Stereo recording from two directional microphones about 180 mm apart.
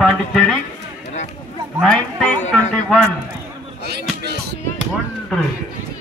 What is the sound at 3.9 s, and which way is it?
Music, 65° right (ahead or behind).